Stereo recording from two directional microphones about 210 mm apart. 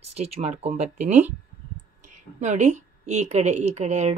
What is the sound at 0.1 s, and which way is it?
A woman's voice, 30° right (ahead or behind).